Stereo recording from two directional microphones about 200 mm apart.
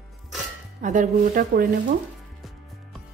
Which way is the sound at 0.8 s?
40° right (ahead or behind).